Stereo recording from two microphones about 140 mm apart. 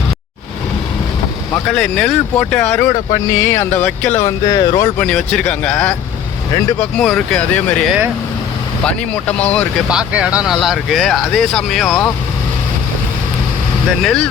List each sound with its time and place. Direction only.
1.6 s speech: 5° left (ahead or behind)
2.9 s speech: 25° left (ahead or behind); by 4.2 s 10° left (ahead or behind)
4.2 s speech: 25° left (ahead or behind)
4.9 s speech: 5° left (ahead or behind)
8.9 s speech: 10° left (ahead or behind)
9.9 s speech: 10° right (ahead or behind)
14.0 s speech: 5° left (ahead or behind)